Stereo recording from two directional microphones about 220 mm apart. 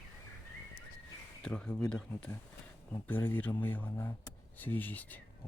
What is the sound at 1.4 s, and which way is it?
Speech, 5° left (ahead or behind).